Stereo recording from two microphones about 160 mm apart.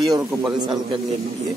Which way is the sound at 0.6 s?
25° right (ahead or behind).